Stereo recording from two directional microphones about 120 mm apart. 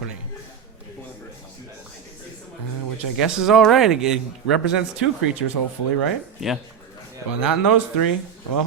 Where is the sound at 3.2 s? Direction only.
5° right (ahead or behind).